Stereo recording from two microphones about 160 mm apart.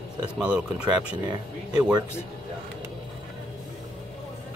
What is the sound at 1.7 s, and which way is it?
Speech, 25° right (ahead or behind).